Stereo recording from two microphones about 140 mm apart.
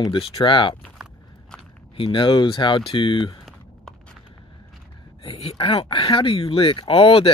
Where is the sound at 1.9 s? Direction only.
35° left (ahead or behind).